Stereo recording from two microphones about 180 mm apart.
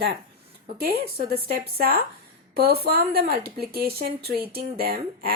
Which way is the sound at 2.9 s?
55° right (ahead or behind).